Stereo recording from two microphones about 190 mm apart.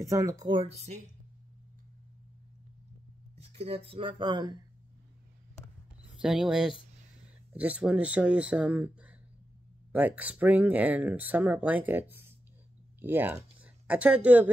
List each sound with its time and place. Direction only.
0.0 s speech: 15° right (ahead or behind)
3.3 s speech: 30° right (ahead or behind)
6.0 s speech: centre (ahead or behind)